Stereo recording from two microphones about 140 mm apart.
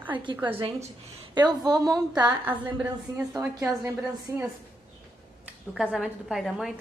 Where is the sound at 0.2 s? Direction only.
35° right (ahead or behind).